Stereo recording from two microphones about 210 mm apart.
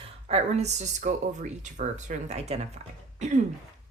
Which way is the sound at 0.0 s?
30° right (ahead or behind).